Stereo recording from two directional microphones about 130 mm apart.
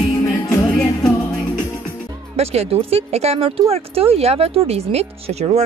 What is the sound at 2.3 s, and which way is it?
Speech, 50° right (ahead or behind).